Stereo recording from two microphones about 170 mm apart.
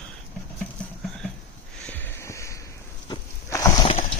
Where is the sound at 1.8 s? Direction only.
10° left (ahead or behind).